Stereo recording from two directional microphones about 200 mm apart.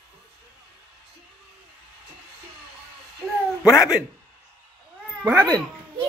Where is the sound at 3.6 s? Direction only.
5° right (ahead or behind).